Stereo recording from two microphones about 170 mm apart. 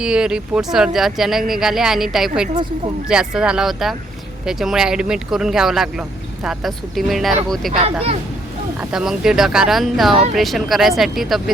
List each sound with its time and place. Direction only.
0.0 s speech: 5° right (ahead or behind)
7.7 s speech: 40° right (ahead or behind)
8.8 s speech: 5° right (ahead or behind)